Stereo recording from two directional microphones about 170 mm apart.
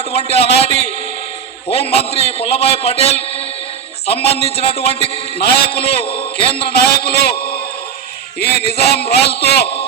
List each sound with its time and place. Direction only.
0.1 s a man's voice: 35° left (ahead or behind)
5.5 s music: 70° left (ahead or behind)
6.1 s a man's voice: 65° left (ahead or behind)
8.4 s music: 70° left (ahead or behind)